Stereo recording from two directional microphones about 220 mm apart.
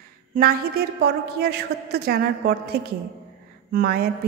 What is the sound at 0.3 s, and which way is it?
A woman's voice, 40° right (ahead or behind).